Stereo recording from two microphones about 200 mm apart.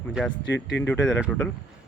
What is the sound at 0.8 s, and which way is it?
Speech, 10° left (ahead or behind).